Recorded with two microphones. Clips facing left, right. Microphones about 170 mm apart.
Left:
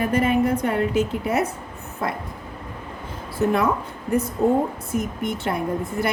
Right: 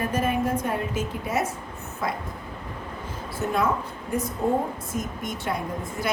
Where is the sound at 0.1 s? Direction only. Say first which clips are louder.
Left 5 dB; 65° left (ahead or behind).